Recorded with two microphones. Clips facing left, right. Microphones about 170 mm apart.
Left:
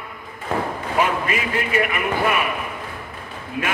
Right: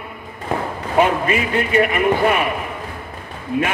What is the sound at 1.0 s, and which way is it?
A man's voice, 30° right (ahead or behind).